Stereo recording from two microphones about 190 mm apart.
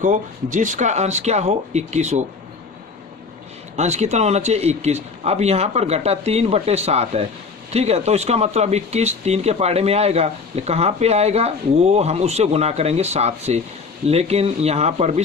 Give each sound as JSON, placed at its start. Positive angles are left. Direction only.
{"t": 0.0, "sound": "speech", "side_deg": -40}
{"t": 3.8, "sound": "speech", "side_deg": -35}